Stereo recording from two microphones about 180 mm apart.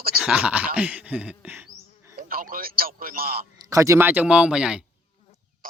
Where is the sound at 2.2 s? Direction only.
55° right (ahead or behind).